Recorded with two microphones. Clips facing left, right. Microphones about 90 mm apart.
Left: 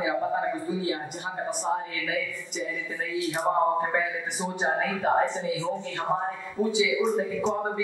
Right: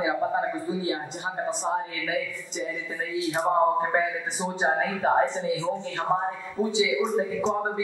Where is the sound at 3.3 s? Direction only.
25° right (ahead or behind).